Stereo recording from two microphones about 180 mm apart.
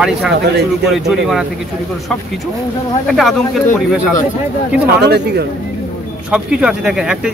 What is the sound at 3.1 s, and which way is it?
Speech, centre (ahead or behind).